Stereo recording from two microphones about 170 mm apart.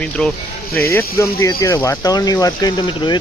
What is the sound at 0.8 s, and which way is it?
Speech, 15° left (ahead or behind).